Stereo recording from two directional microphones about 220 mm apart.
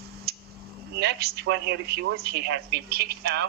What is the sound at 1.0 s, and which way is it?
A man's voice, 45° right (ahead or behind).